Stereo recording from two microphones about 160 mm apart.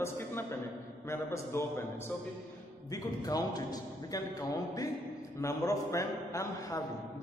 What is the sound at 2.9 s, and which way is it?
A man's voice, 25° left (ahead or behind).